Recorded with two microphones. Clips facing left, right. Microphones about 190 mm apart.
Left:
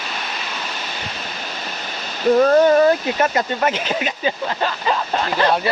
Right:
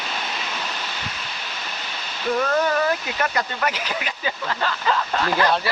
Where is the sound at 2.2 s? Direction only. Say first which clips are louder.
Left 9 dB; 35° left (ahead or behind).